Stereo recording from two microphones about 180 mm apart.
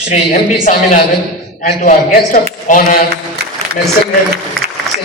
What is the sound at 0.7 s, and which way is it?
A man's voice, 45° left (ahead or behind).